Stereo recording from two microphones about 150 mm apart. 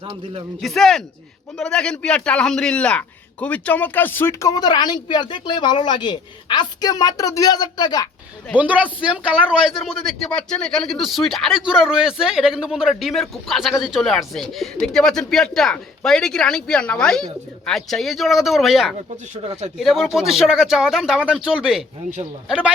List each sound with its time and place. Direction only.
0.6 s speech: centre (ahead or behind); by 8.0 s 30° left (ahead or behind)
8.5 s speech: 10° right (ahead or behind)